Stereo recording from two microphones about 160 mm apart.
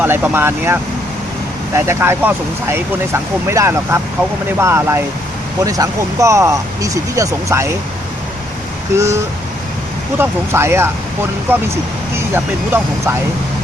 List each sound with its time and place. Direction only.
0.0 s speech: 15° right (ahead or behind)
10.2 s speech: 15° right (ahead or behind)